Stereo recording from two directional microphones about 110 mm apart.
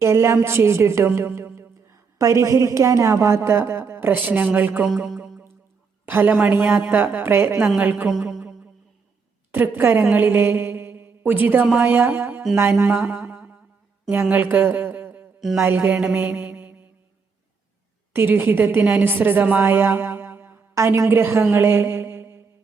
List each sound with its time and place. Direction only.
0.0 s a woman's voice: 25° right (ahead or behind)
4.9 s a sound: 10° right (ahead or behind)
6.1 s a woman's voice: 20° right (ahead or behind)
7.8 s mantra: 15° right (ahead or behind)
8.2 s a sound: 5° right (ahead or behind)
9.5 s a woman's voice: 20° right (ahead or behind)
15.4 s speech: centre (ahead or behind)
15.6 s mantra: 15° right (ahead or behind)
18.1 s a woman's voice: 20° right (ahead or behind)
21.5 s mantra: 20° right (ahead or behind)